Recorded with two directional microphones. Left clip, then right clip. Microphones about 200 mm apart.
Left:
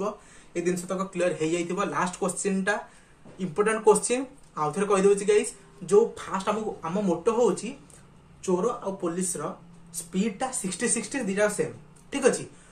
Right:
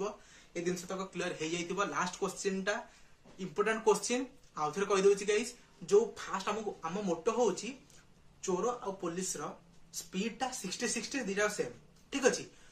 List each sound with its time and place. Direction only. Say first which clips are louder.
0.0 s speech: left 8 dB; 10° right (ahead or behind)